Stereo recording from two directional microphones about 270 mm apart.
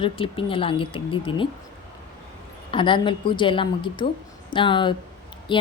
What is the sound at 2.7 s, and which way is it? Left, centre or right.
A woman's voice, centre.